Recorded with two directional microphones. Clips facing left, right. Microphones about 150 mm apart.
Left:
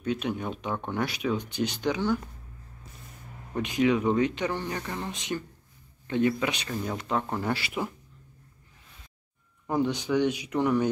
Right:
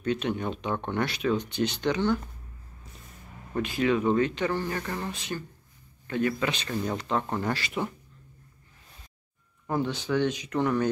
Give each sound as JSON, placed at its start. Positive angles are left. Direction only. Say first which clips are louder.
{"t": 0.0, "sound": "speech", "louder": "right 1 dB", "side_deg": 5}
{"t": 3.5, "sound": "speech", "louder": "left 1 dB", "side_deg": 15}
{"t": 9.7, "sound": "speech", "louder": "left 2 dB", "side_deg": 15}